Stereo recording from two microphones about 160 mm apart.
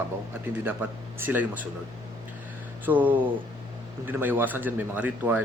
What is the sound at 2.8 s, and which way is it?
A man's voice, 10° right (ahead or behind).